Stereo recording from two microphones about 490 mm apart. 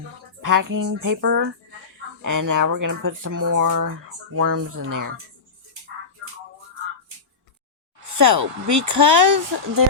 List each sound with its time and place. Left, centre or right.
0.4 s speech: right
2.2 s speech: right
8.2 s speech: right